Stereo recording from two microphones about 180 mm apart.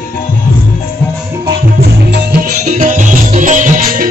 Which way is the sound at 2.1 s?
55° right (ahead or behind).